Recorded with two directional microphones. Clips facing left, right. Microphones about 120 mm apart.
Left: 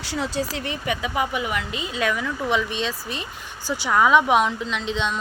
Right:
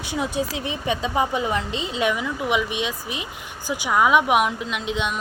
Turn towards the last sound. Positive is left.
turn(degrees=-10)  # may be behind; listen again after turning